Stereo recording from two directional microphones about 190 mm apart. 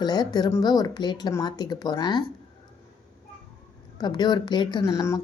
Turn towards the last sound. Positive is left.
turn(degrees=15)  # may be behind; listen again after turning